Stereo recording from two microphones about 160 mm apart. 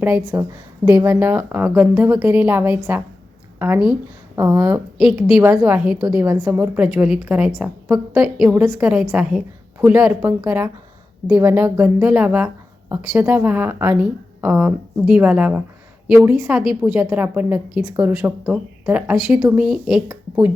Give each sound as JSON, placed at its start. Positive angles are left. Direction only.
{"t": 0.3, "sound": "a woman's voice", "side_deg": -15}
{"t": 20.1, "sound": "speech", "side_deg": -15}